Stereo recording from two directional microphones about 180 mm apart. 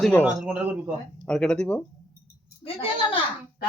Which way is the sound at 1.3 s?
5° left (ahead or behind).